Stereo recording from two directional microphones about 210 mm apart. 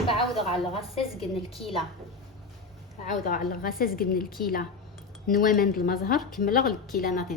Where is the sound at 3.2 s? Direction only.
40° left (ahead or behind).